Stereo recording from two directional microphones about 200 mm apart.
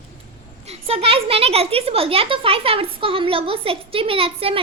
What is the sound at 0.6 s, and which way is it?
Speech, 30° right (ahead or behind).